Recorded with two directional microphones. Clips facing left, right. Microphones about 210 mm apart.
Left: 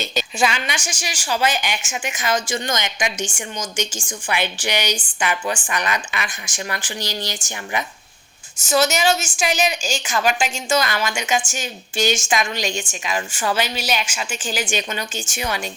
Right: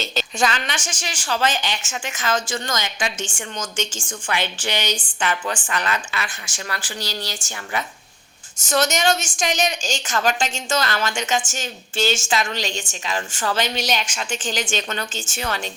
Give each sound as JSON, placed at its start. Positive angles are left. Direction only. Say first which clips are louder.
{"t": 0.0, "sound": "a woman's voice", "louder": "left 1 dB", "side_deg": 15}
{"t": 8.7, "sound": "a woman's voice", "louder": "left 2 dB", "side_deg": 5}